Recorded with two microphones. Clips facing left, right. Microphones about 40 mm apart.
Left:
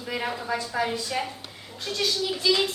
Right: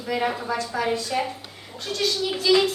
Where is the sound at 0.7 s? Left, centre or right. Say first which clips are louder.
Even; centre.